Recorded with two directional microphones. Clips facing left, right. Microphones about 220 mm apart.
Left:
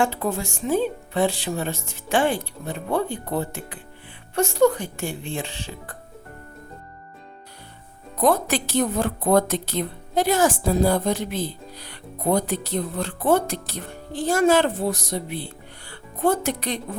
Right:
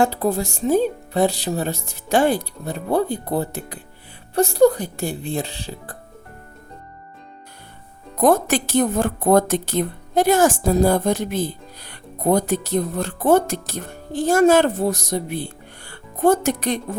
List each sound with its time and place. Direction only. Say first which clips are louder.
0.0 s speech: right 4 dB; 35° right (ahead or behind)
8.2 s a woman's voice: right 4 dB; 45° right (ahead or behind)